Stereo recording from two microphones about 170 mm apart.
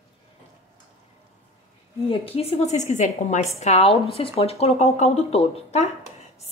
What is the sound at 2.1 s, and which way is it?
Speech, 35° left (ahead or behind).